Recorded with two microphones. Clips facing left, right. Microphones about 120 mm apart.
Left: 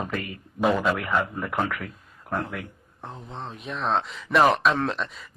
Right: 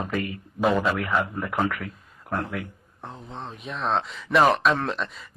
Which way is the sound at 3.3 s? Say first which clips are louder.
Left 1 dB; centre (ahead or behind).